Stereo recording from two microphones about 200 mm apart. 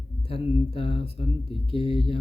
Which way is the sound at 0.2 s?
25° left (ahead or behind).